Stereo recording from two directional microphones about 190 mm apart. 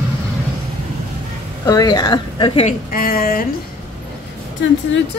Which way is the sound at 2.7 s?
45° left (ahead or behind).